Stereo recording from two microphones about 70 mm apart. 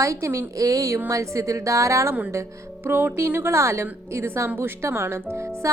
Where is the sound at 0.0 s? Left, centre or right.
Right.